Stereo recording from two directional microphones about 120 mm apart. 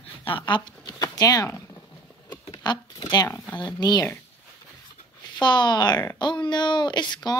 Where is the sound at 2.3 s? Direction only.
35° left (ahead or behind).